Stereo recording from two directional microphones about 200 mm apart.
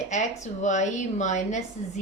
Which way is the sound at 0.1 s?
35° left (ahead or behind).